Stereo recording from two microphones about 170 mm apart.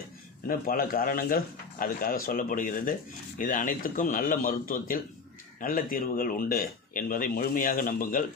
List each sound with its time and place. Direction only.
0.4 s speech: 55° left (ahead or behind)